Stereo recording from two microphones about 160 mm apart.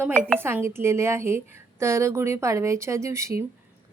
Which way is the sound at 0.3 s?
15° right (ahead or behind).